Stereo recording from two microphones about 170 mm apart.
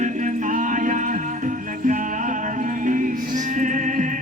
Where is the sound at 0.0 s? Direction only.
45° right (ahead or behind).